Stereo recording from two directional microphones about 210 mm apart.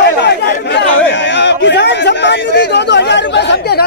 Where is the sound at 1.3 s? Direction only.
55° left (ahead or behind).